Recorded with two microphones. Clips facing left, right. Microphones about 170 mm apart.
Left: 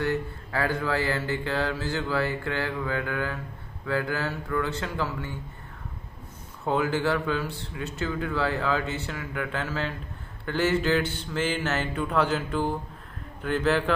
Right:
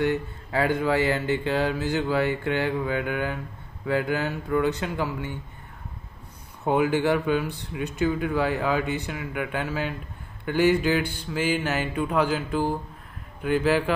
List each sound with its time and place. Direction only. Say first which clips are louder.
0.0 s speech: right 3 dB; 20° right (ahead or behind)
6.6 s speech: right 3 dB; 15° right (ahead or behind)